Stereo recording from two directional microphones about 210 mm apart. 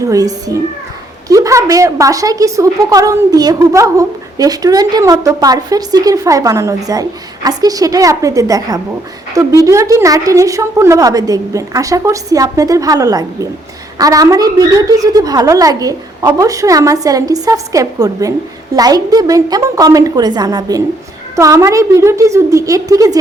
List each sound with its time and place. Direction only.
0.0 s a woman's voice: 15° right (ahead or behind)